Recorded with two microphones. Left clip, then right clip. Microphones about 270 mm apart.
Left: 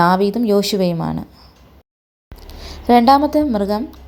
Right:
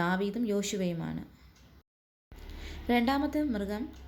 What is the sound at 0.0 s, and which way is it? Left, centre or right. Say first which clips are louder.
A woman's voice: left 17 dB; left.